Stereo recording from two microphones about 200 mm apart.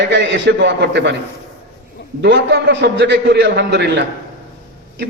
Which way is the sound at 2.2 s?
60° right (ahead or behind).